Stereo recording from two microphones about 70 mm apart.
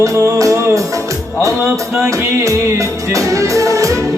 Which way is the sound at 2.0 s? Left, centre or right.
Right.